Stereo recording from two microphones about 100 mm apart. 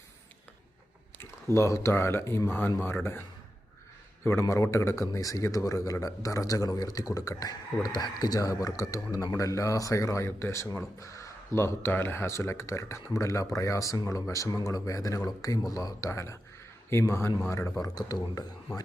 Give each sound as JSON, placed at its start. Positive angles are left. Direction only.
{"t": 1.2, "sound": "a man's voice", "side_deg": 25}
{"t": 17.8, "sound": "a man's voice", "side_deg": 40}